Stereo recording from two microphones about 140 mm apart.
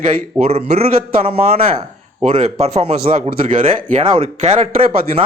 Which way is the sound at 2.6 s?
45° right (ahead or behind).